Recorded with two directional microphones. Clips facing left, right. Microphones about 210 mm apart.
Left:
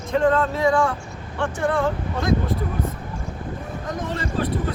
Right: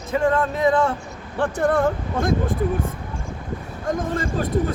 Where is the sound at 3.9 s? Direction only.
50° right (ahead or behind).